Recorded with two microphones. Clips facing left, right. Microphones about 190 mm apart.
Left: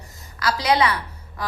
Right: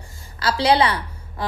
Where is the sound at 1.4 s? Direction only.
25° right (ahead or behind).